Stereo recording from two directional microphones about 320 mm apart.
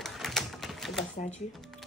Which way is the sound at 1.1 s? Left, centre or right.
Left.